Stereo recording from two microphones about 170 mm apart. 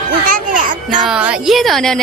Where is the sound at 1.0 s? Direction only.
5° right (ahead or behind).